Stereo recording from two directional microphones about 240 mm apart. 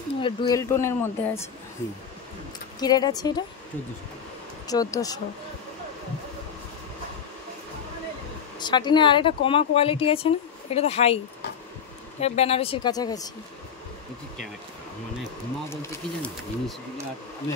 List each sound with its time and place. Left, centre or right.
0.2 s speech: centre
2.8 s speech: centre
4.6 s speech: centre
8.5 s speech: centre
12.2 s speech: left
15.7 s speech: centre